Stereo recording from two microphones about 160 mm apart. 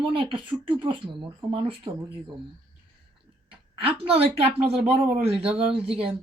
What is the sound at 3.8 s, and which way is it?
Speech, 40° right (ahead or behind).